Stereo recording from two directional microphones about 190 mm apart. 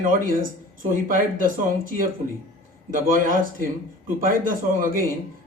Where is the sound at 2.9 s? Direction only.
45° right (ahead or behind).